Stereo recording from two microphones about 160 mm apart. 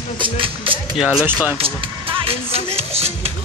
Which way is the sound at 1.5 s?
35° right (ahead or behind).